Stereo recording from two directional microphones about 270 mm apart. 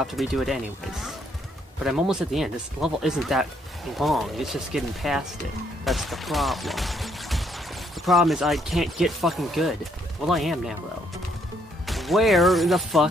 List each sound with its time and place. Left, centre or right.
0.0 s speech: centre
11.8 s speech: centre